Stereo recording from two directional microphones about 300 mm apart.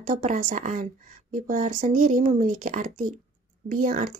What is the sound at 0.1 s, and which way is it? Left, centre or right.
Speech, right.